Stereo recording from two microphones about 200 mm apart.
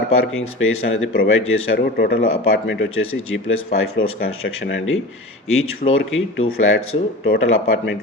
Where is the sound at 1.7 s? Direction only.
50° left (ahead or behind).